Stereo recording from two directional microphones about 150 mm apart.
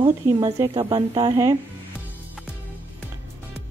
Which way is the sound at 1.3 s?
20° right (ahead or behind).